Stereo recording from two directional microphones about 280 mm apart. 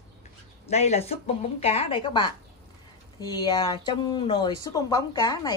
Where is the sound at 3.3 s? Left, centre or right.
Centre.